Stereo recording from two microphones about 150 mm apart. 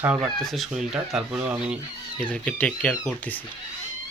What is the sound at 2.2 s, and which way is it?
Speech, 10° left (ahead or behind).